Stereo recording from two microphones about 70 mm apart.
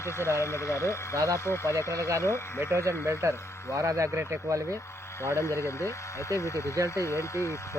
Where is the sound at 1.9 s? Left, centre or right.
Right.